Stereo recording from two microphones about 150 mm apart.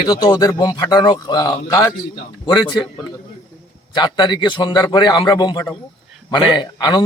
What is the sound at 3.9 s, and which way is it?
A man's voice, 30° left (ahead or behind).